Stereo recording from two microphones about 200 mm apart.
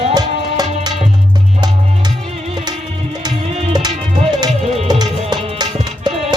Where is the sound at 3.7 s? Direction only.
20° right (ahead or behind).